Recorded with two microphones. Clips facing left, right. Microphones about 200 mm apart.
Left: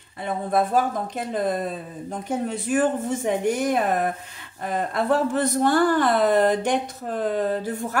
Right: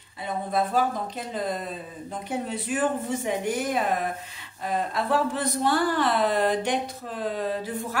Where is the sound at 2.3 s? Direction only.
45° left (ahead or behind).